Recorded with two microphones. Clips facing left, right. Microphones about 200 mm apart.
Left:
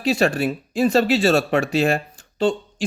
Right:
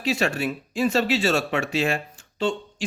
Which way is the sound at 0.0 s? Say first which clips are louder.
Left 5 dB; 35° left (ahead or behind).